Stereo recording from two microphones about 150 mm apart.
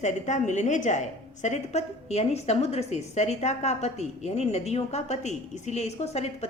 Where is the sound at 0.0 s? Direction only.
55° left (ahead or behind).